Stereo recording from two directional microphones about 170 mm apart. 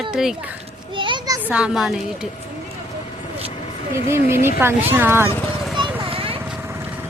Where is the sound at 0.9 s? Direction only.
30° right (ahead or behind).